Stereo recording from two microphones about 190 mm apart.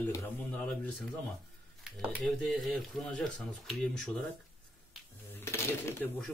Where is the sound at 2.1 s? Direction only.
5° left (ahead or behind).